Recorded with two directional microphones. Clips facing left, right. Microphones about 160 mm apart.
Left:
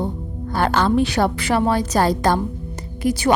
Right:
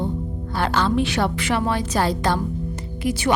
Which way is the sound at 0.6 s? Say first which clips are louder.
Left 3 dB; 45° left (ahead or behind).